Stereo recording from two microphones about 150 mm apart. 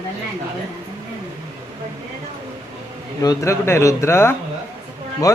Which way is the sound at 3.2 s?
20° left (ahead or behind).